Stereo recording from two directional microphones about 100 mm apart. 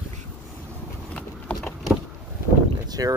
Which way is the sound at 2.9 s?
40° right (ahead or behind).